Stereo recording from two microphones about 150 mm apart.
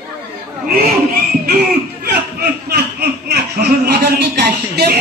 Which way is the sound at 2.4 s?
90° right.